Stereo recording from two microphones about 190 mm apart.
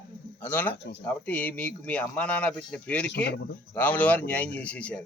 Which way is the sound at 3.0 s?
60° left (ahead or behind).